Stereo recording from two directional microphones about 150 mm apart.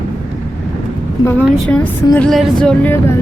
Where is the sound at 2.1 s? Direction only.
5° left (ahead or behind).